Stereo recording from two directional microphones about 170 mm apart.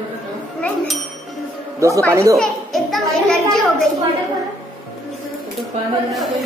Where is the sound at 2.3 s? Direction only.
Centre (ahead or behind).